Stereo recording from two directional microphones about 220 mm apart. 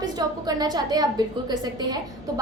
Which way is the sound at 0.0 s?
20° right (ahead or behind).